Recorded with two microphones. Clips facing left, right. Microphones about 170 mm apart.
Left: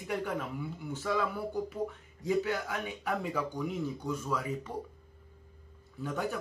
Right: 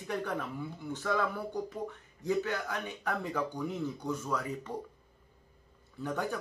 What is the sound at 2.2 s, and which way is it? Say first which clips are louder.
Speech: left 1 dB; 15° left (ahead or behind).